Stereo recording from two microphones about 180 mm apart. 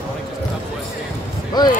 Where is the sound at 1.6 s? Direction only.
20° left (ahead or behind).